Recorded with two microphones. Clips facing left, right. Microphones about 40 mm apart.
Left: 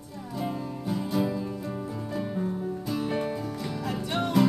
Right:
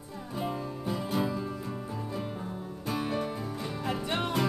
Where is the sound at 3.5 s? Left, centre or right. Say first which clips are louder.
Left 1 dB; right.